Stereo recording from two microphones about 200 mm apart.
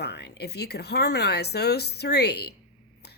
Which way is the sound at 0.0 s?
55° left (ahead or behind).